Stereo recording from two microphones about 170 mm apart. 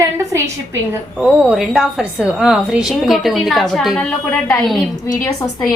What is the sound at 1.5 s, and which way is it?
A woman's voice, 5° right (ahead or behind).